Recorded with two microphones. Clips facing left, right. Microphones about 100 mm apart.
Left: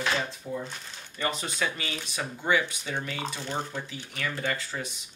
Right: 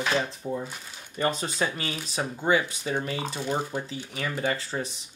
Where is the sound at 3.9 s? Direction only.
35° right (ahead or behind).